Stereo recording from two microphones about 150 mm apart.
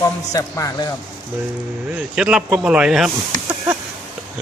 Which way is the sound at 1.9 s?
5° right (ahead or behind).